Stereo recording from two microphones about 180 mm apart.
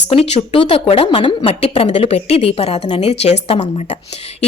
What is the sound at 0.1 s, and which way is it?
A woman's voice, 35° left (ahead or behind).